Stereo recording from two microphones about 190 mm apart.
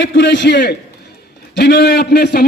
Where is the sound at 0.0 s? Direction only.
70° left (ahead or behind).